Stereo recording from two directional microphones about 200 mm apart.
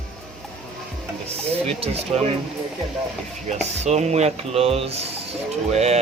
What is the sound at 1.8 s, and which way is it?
Speech, 30° right (ahead or behind).